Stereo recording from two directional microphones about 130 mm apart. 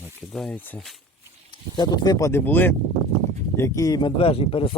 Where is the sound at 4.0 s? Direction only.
45° left (ahead or behind).